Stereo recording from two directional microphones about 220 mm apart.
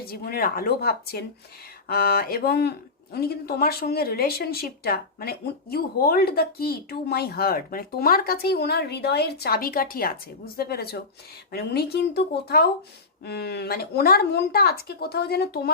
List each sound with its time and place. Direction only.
0.0 s speech: 45° left (ahead or behind)